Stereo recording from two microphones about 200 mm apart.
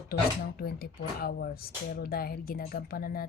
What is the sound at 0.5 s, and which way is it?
Speech, 50° left (ahead or behind).